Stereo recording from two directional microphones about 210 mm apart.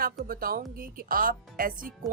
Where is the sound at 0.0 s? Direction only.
45° right (ahead or behind).